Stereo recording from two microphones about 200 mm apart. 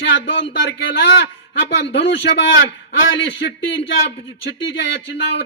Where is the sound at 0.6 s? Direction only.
60° left (ahead or behind).